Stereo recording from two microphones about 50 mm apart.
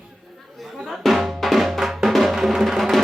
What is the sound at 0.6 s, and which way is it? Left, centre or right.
Drum, centre.